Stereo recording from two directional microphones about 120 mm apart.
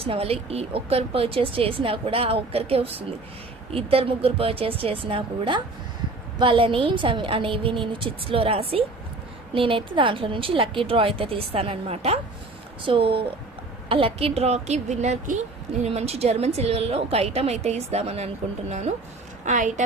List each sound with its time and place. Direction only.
0.0 s a woman's voice: 55° right (ahead or behind)
12.8 s a woman's voice: 50° right (ahead or behind); by 15.4 s 75° right (ahead or behind)
15.8 s a woman's voice: 60° right (ahead or behind)
19.5 s a woman's voice: 90° right